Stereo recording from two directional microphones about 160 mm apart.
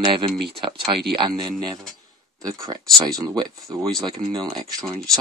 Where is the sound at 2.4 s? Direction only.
20° right (ahead or behind).